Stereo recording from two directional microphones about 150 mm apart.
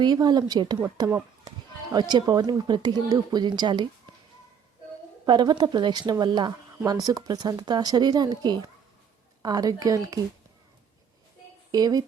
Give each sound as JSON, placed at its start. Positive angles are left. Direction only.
{"t": 0.0, "sound": "a woman's voice", "side_deg": -30}
{"t": 5.2, "sound": "a woman's voice", "side_deg": -30}
{"t": 11.7, "sound": "a woman's voice", "side_deg": -25}